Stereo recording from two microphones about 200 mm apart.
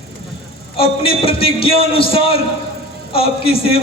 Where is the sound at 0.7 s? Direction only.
30° left (ahead or behind).